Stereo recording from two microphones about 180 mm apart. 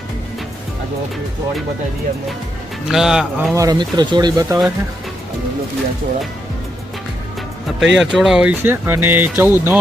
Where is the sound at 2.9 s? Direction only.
5° right (ahead or behind).